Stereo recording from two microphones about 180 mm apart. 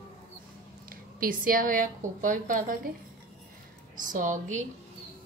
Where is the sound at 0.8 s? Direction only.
50° right (ahead or behind).